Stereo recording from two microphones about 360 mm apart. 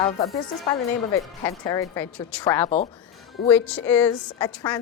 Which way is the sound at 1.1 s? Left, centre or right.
Centre.